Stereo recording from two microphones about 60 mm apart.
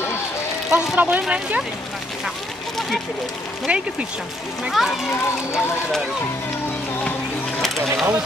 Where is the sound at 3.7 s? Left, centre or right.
Centre.